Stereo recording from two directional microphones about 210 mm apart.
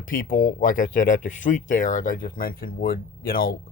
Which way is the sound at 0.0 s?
40° left (ahead or behind).